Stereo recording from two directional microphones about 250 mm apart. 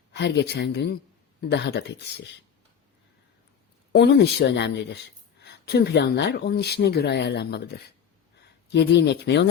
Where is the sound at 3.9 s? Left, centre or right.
Left.